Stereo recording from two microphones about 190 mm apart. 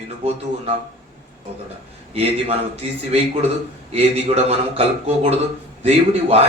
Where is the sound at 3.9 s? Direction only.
35° right (ahead or behind).